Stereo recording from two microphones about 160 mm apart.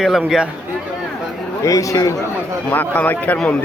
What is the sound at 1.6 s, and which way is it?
Speech, 20° left (ahead or behind).